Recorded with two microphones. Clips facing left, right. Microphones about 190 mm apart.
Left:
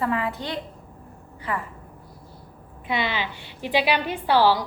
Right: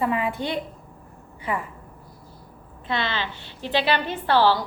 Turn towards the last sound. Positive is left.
turn(degrees=10)  # may be behind; listen again after turning